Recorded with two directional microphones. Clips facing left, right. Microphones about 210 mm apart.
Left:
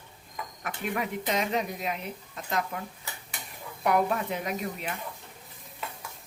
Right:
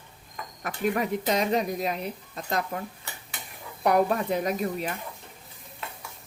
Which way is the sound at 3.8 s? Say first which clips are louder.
Right 3 dB; 40° right (ahead or behind).